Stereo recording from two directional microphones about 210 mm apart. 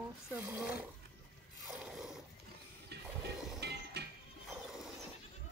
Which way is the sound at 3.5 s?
50° right (ahead or behind).